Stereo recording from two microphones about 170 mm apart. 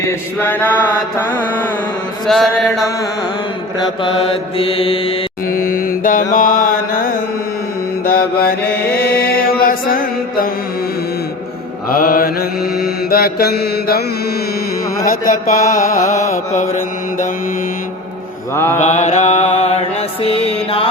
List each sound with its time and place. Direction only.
0.0 s a sound: 10° left (ahead or behind)
2.2 s mantra: centre (ahead or behind)
3.8 s mantra: 30° left (ahead or behind)
5.5 s mantra: 55° left (ahead or behind)
11.9 s mantra: 55° left (ahead or behind)
15.3 s mantra: 55° left (ahead or behind)
18.5 s a sound: 15° left (ahead or behind)
18.8 s mantra: 45° left (ahead or behind)